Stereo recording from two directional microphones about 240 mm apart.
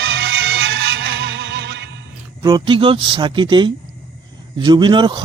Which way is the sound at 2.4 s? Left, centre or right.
Centre.